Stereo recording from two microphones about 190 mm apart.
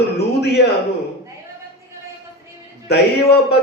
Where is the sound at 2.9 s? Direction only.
60° left (ahead or behind).